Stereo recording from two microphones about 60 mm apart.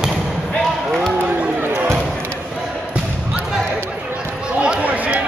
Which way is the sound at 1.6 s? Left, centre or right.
Right.